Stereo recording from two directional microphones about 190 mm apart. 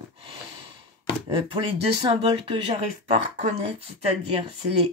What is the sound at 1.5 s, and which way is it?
Speech, 30° right (ahead or behind).